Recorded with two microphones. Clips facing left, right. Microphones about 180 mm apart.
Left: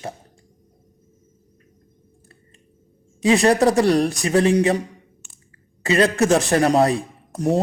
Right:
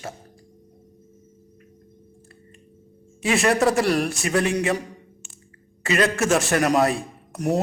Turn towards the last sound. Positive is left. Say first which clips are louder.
# left 3 dB
turn(degrees=30)  # may be behind; listen again after turning